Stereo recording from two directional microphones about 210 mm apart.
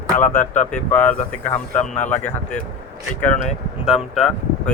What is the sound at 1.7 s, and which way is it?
Speech, 35° left (ahead or behind).